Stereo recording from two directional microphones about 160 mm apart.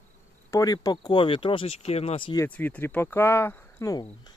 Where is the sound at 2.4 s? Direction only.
10° left (ahead or behind).